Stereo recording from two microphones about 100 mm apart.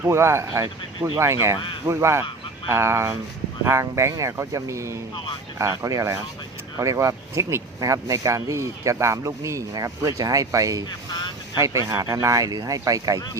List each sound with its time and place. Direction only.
0.0 s speech: 25° right (ahead or behind)